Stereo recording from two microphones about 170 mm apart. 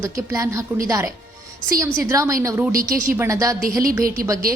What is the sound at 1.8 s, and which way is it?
A woman's voice, 20° right (ahead or behind).